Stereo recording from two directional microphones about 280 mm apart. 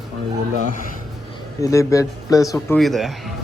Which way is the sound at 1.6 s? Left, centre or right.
Centre.